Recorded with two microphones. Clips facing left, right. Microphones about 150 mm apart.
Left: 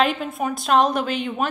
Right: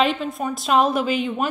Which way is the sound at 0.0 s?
Centre (ahead or behind).